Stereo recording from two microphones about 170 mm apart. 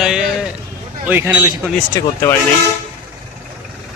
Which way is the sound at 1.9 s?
15° left (ahead or behind).